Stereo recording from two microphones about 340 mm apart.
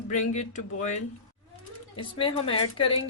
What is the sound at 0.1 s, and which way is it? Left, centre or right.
Speech, left.